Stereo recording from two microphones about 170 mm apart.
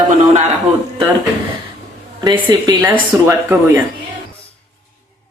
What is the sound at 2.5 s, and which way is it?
Speech, 25° right (ahead or behind).